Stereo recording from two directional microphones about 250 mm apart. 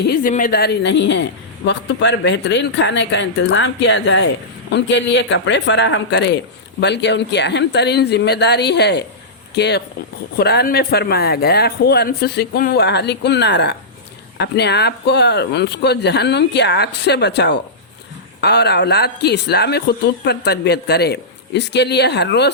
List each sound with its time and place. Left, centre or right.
0.1 s a woman's voice: left